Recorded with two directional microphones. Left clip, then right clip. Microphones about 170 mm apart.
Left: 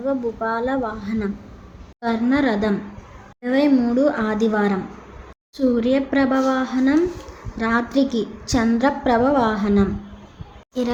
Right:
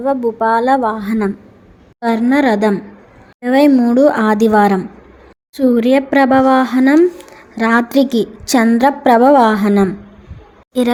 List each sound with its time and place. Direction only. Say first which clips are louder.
0.0 s a woman's voice: right 8 dB; 50° right (ahead or behind)